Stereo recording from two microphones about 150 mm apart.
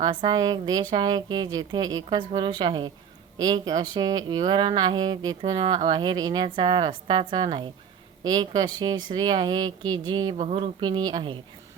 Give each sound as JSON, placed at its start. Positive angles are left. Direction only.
{"t": 0.0, "sound": "a woman's voice", "side_deg": -30}